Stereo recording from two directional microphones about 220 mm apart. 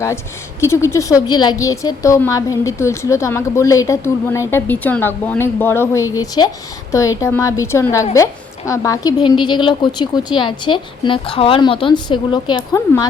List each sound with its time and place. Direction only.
0.6 s a woman's voice: 10° left (ahead or behind)